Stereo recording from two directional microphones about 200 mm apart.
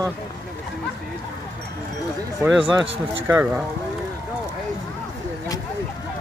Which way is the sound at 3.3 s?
10° right (ahead or behind).